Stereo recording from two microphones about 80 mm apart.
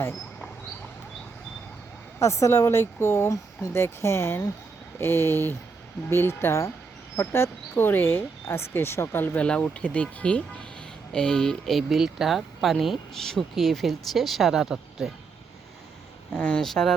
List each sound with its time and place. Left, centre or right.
2.1 s speech: left; by 15.1 s centre
16.3 s speech: centre